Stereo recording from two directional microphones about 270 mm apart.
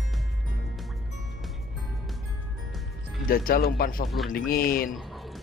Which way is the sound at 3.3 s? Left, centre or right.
Left.